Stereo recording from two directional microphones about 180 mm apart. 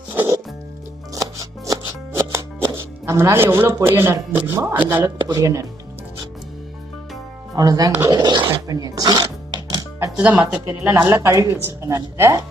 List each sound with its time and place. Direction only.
0.1 s music: 10° right (ahead or behind)
2.7 s speech: 15° right (ahead or behind)
7.5 s speech: 20° right (ahead or behind)
8.1 s dog: 25° right (ahead or behind)
8.4 s music: 20° right (ahead or behind)
10.2 s speech: 10° right (ahead or behind)